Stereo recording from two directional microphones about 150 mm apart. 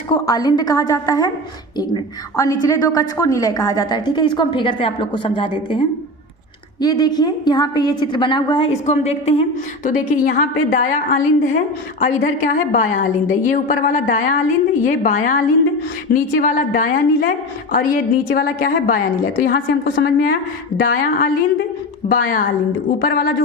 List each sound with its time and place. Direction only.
0.1 s a woman's voice: 25° left (ahead or behind)
6.8 s a woman's voice: 25° left (ahead or behind)
9.8 s a woman's voice: 70° left (ahead or behind)
19.4 s a woman's voice: 90° left; by 22.4 s 70° left (ahead or behind)
23.0 s a woman's voice: 85° left